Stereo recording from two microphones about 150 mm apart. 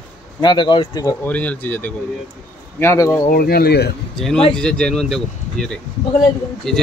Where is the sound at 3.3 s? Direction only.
80° left.